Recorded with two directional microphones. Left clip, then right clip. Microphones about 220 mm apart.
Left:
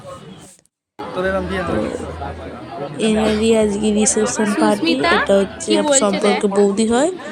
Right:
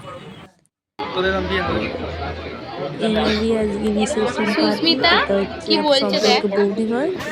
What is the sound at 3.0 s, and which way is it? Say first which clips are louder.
A woman's voice: left 2 dB; 20° left (ahead or behind).